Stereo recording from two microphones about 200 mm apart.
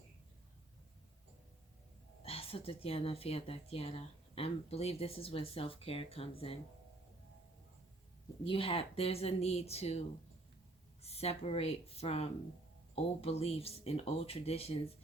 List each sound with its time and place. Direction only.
2.2 s speech: 30° left (ahead or behind)
8.4 s speech: 25° left (ahead or behind)
11.0 s speech: 30° left (ahead or behind)